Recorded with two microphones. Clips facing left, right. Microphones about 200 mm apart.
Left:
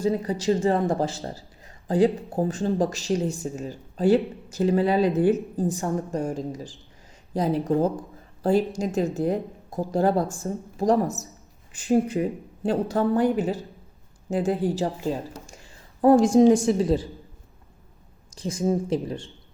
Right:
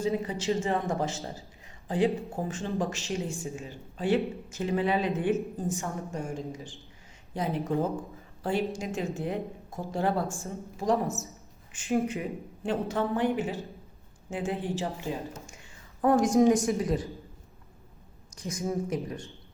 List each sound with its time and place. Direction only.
0.0 s speech: 40° left (ahead or behind)
18.3 s speech: 30° left (ahead or behind)